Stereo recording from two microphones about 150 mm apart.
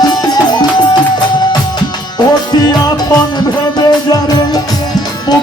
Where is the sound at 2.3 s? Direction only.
25° left (ahead or behind).